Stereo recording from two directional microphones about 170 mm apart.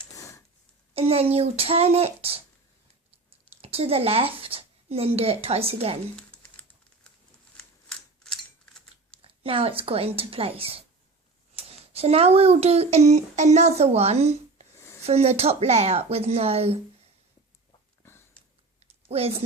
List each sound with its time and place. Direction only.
0.1 s a sound: 20° left (ahead or behind)
0.9 s a child's voice: 35° right (ahead or behind)
3.6 s speech: 35° right (ahead or behind)
6.1 s typing: 5° left (ahead or behind)
7.5 s scissors: 5° left (ahead or behind)
9.2 s a child's voice: 35° right (ahead or behind)
19.0 s speech: 35° right (ahead or behind)